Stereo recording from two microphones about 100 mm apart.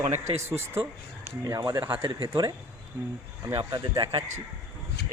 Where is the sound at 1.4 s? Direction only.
35° right (ahead or behind).